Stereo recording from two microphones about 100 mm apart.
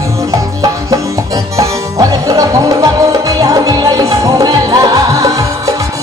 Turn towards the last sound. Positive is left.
turn(degrees=-35)  # may be behind; listen again after turning